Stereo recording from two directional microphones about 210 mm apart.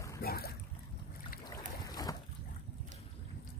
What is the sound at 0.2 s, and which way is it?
Boat, 45° left (ahead or behind).